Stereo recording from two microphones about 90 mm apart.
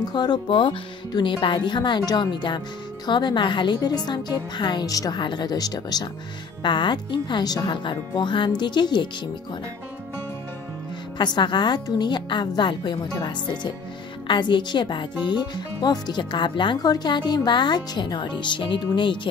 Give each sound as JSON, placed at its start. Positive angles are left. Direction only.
{"t": 0.0, "sound": "speech", "side_deg": 50}
{"t": 0.5, "sound": "music", "side_deg": 75}
{"t": 1.1, "sound": "speech", "side_deg": 65}
{"t": 4.8, "sound": "speech", "side_deg": 40}
{"t": 5.2, "sound": "speech", "side_deg": 55}
{"t": 6.6, "sound": "speech", "side_deg": 60}
{"t": 7.7, "sound": "speech", "side_deg": 65}
{"t": 11.1, "sound": "speech", "side_deg": 55}